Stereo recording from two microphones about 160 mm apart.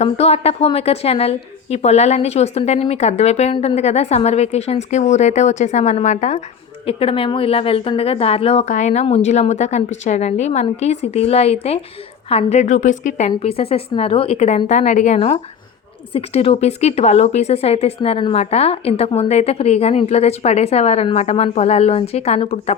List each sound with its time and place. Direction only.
0.0 s a woman's voice: 40° left (ahead or behind)
6.8 s a woman's voice: 35° left (ahead or behind)